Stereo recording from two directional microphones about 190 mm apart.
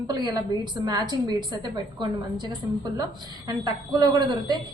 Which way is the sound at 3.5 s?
20° right (ahead or behind).